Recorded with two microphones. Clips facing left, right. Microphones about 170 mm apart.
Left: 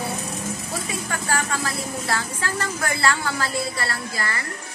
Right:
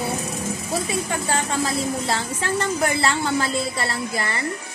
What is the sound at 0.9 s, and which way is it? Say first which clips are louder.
A woman's voice: even; 25° right (ahead or behind).